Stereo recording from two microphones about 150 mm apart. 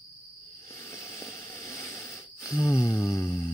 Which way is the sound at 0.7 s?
20° left (ahead or behind).